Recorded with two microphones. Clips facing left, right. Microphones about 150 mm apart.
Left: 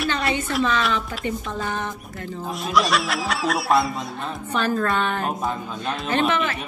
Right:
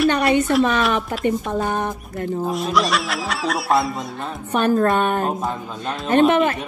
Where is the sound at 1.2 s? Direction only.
50° right (ahead or behind).